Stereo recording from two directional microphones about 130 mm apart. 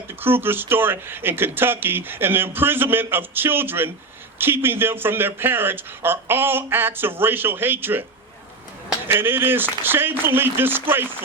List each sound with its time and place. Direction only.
0.1 s speech: 15° right (ahead or behind)
9.0 s speech: 15° right (ahead or behind)